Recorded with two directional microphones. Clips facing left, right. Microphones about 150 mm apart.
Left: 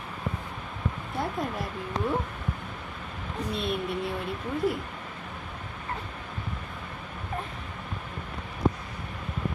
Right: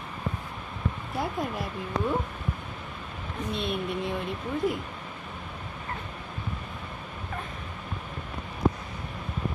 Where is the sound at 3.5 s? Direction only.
Centre (ahead or behind).